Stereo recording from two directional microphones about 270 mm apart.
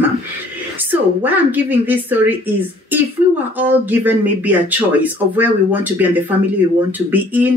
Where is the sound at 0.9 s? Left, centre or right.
Centre.